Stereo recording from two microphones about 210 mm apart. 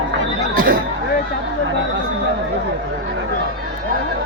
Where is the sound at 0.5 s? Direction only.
40° right (ahead or behind).